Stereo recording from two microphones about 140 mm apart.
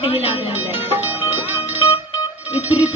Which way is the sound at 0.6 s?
10° right (ahead or behind).